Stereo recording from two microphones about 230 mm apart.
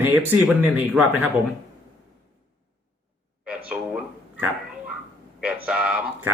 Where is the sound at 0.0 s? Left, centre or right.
Centre.